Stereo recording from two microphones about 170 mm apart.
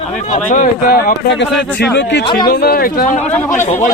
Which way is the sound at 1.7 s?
85° left.